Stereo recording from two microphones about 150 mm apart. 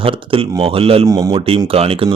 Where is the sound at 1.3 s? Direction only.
40° right (ahead or behind).